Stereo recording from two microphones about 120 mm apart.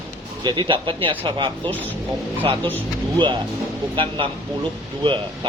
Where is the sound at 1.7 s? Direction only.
15° left (ahead or behind).